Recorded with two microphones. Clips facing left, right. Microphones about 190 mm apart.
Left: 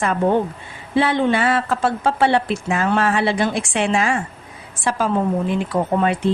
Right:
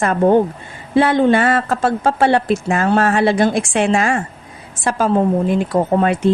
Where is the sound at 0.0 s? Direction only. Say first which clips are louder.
Right 5 dB; 45° right (ahead or behind).